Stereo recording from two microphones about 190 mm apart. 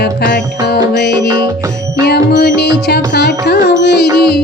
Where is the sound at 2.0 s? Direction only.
60° left (ahead or behind).